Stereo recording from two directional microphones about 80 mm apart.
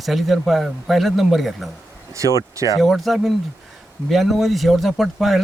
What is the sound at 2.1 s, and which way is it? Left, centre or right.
Speech, right.